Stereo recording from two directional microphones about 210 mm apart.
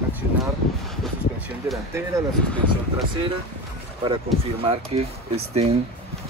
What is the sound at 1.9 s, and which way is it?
Speech, 15° right (ahead or behind).